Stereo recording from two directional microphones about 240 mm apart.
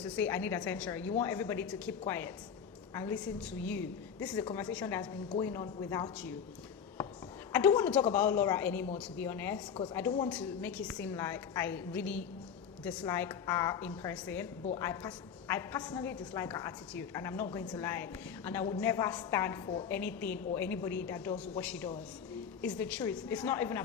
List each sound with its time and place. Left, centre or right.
0.0 s a woman's voice: centre
7.5 s a woman's voice: centre
9.8 s speech: left
10.2 s a woman's voice: centre